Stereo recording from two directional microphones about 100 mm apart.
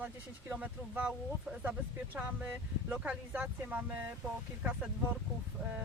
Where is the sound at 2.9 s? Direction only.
10° right (ahead or behind).